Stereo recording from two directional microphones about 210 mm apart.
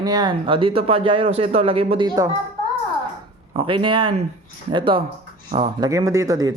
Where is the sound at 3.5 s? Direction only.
25° right (ahead or behind).